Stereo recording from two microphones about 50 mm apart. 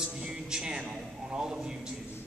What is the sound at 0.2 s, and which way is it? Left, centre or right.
Music, centre.